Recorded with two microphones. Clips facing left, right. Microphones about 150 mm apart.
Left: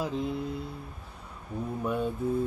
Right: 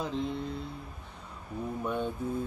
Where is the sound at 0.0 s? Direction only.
5° left (ahead or behind).